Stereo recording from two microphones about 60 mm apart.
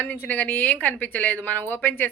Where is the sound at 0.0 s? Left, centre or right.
Left.